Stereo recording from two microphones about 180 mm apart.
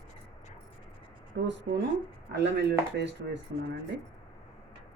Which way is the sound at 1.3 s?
70° right (ahead or behind).